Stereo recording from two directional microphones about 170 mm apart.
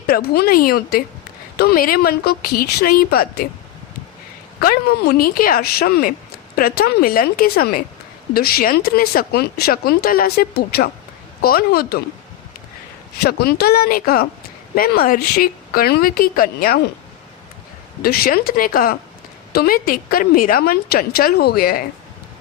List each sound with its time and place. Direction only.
0.1 s speech: 65° left (ahead or behind)
4.6 s speech: 65° left (ahead or behind)
13.2 s speech: 70° left (ahead or behind)
18.0 s speech: 60° left (ahead or behind)